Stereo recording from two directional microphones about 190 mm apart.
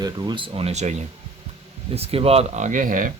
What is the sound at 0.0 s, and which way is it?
Speech, 20° right (ahead or behind).